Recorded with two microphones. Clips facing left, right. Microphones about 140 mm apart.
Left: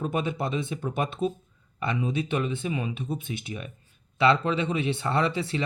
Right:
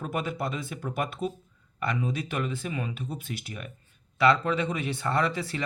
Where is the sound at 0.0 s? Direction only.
25° left (ahead or behind).